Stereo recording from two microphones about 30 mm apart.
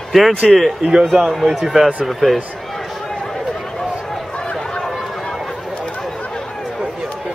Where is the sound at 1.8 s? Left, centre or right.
Centre.